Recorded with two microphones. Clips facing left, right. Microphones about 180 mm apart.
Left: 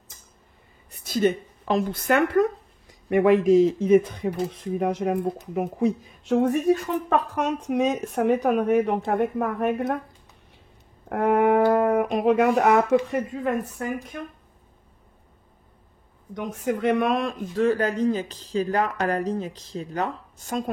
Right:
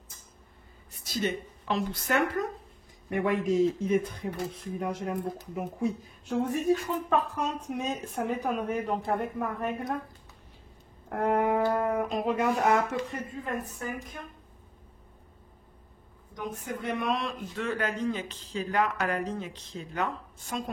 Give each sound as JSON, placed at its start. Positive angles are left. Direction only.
{"t": 1.0, "sound": "a woman's voice", "side_deg": 55}
{"t": 3.1, "sound": "a woman's voice", "side_deg": 85}
{"t": 11.1, "sound": "a woman's voice", "side_deg": 65}
{"t": 16.3, "sound": "a man's voice", "side_deg": 85}